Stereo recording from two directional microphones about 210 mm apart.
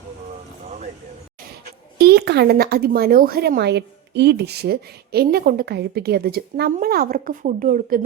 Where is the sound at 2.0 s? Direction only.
50° right (ahead or behind).